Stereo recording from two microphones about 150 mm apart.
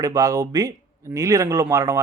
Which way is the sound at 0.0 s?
20° right (ahead or behind).